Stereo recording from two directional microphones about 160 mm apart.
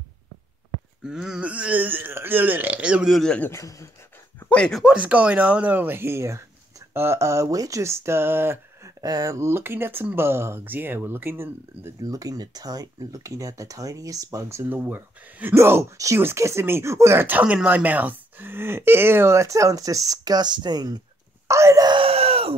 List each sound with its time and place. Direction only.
1.0 s speech: 5° right (ahead or behind); by 3.9 s 15° left (ahead or behind)
4.4 s speech: 5° left (ahead or behind); by 21.0 s 25° right (ahead or behind)
21.5 s wail: 20° right (ahead or behind); by 22.5 s 40° right (ahead or behind)